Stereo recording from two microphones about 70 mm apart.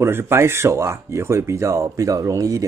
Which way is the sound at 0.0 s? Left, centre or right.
Right.